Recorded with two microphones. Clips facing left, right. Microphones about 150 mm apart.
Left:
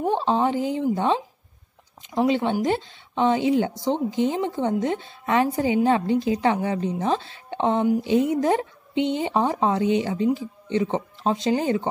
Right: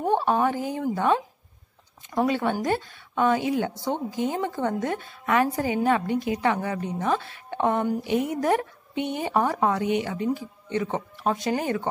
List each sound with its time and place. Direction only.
0.2 s a woman's voice: 20° left (ahead or behind)